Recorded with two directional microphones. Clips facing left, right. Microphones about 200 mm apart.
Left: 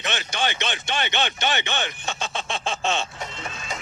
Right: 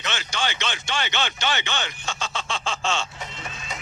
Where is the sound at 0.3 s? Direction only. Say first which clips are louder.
Left 1 dB; 20° left (ahead or behind).